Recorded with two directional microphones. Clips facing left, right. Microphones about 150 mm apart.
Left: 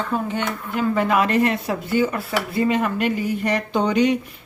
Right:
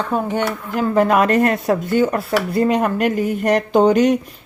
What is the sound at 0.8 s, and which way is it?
Dishes, 45° right (ahead or behind).